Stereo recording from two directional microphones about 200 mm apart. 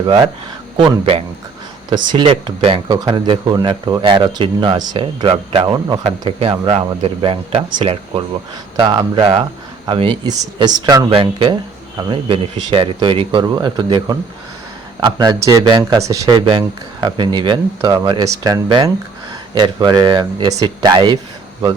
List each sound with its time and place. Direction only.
0.0 s speech: 25° right (ahead or behind)